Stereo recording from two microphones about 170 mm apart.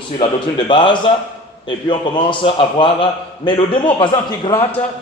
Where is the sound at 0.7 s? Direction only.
25° left (ahead or behind).